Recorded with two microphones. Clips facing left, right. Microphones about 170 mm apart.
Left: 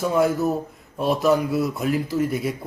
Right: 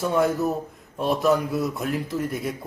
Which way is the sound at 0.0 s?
Centre (ahead or behind).